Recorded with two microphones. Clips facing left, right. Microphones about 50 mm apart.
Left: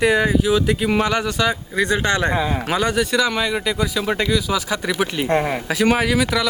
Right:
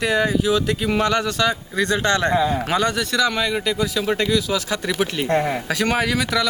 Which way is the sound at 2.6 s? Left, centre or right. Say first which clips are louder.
Left 1 dB; centre.